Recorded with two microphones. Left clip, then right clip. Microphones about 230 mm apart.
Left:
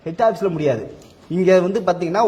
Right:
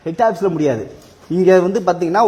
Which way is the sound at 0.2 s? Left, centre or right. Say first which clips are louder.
Right 2 dB; right.